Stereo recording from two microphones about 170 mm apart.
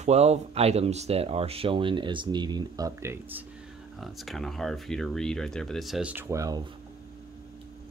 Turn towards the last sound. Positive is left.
turn(degrees=-20)  # may be behind; listen again after turning